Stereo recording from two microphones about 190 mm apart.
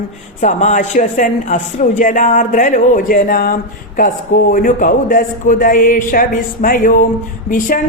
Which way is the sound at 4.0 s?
45° left (ahead or behind).